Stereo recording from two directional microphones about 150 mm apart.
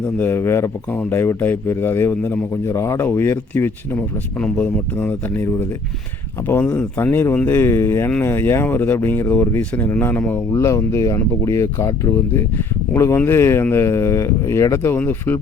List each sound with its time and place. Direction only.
0.0 s speech: 15° left (ahead or behind)